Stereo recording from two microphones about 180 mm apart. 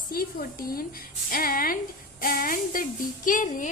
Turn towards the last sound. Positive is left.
turn(degrees=45)  # may be behind; listen again after turning